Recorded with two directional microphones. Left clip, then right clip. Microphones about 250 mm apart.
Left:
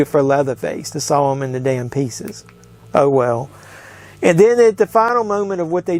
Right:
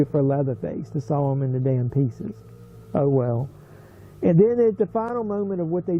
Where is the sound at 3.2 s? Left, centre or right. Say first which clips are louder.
Left 9 dB; centre.